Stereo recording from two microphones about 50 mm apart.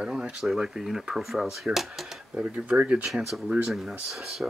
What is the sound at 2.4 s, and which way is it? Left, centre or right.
Speech, right.